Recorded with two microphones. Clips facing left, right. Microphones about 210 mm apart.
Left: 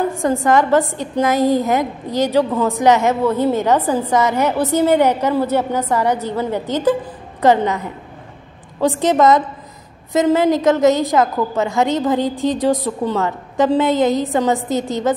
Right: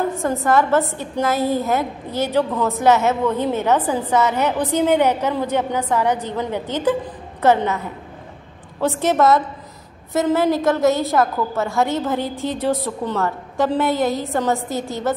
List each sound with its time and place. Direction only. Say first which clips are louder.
0.1 s a woman's voice: left 3 dB; 15° left (ahead or behind)
8.8 s a woman's voice: left 3 dB; 15° left (ahead or behind)